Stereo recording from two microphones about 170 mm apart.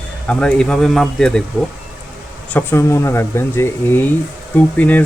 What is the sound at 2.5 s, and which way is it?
Speech, 10° left (ahead or behind).